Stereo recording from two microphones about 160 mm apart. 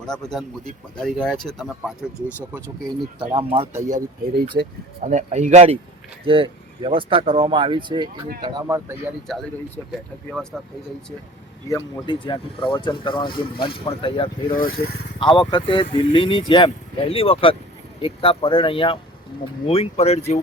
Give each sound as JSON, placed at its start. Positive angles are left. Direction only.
{"t": 0.0, "sound": "speech", "side_deg": 5}
{"t": 3.2, "sound": "speech", "side_deg": -30}
{"t": 3.7, "sound": "speech", "side_deg": -15}
{"t": 4.6, "sound": "speech", "side_deg": -75}
{"t": 5.0, "sound": "speech", "side_deg": -50}
{"t": 6.2, "sound": "speech", "side_deg": -35}
{"t": 8.6, "sound": "speech", "side_deg": -15}
{"t": 9.9, "sound": "speech", "side_deg": 0}
{"t": 11.7, "sound": "speech", "side_deg": 30}
{"t": 14.5, "sound": "speech", "side_deg": 65}
{"t": 15.2, "sound": "speech", "side_deg": 30}